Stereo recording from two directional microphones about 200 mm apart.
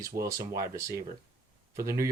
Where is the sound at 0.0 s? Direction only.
15° right (ahead or behind).